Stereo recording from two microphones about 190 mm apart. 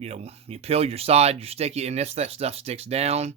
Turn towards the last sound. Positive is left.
turn(degrees=-35)  # may be behind; listen again after turning